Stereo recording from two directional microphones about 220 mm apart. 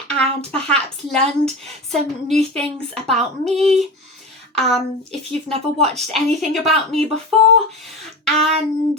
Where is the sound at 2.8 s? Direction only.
25° right (ahead or behind).